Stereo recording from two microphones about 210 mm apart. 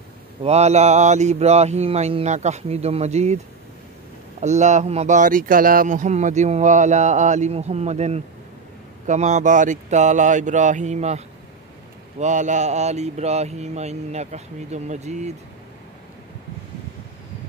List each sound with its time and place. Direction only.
0.4 s speech: 30° right (ahead or behind)
4.4 s speech: 35° right (ahead or behind)